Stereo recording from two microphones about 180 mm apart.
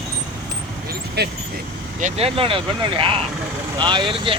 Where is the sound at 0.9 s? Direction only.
65° right (ahead or behind).